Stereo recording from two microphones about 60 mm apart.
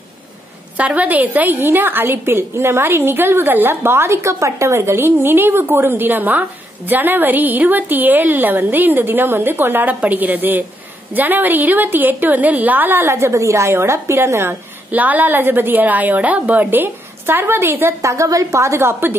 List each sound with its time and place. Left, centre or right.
0.7 s a woman's voice: right
14.5 s a woman's voice: right
18.0 s a woman's voice: right